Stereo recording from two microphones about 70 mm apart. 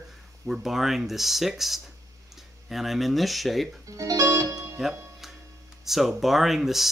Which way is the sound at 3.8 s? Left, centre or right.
Right.